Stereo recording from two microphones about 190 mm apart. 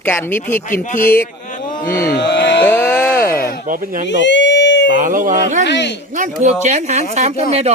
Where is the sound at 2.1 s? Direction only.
65° left (ahead or behind).